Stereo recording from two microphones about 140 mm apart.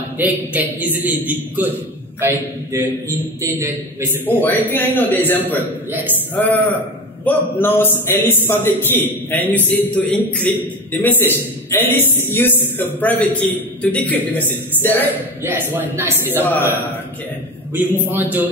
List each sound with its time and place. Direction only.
0.2 s a man's voice: 10° right (ahead or behind)
4.3 s a man's voice: 15° left (ahead or behind)
5.9 s a man's voice: 15° right (ahead or behind)
6.3 s a man's voice: 15° left (ahead or behind)
15.7 s a man's voice: 15° right (ahead or behind)
16.4 s a man's voice: 15° left (ahead or behind)
18.0 s a man's voice: 15° right (ahead or behind)